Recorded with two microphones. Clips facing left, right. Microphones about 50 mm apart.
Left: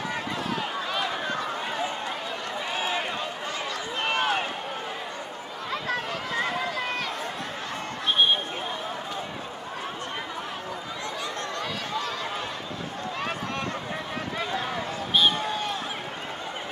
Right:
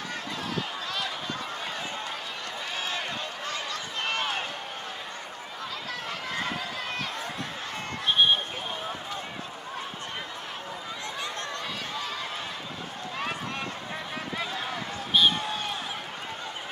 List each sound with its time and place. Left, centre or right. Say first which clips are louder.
2.8 s run: left 3 dB; centre
14.4 s run: left 5 dB; centre